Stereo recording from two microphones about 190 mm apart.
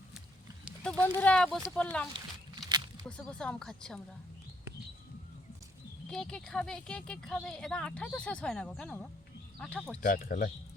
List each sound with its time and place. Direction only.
1.0 s speech: 10° left (ahead or behind)
2.1 s a sound: 25° right (ahead or behind)
3.1 s speech: 5° left (ahead or behind)
6.1 s speech: 5° left (ahead or behind)
10.0 s speech: 45° left (ahead or behind)